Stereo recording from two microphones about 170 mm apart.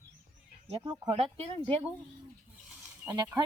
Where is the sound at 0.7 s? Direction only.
25° right (ahead or behind).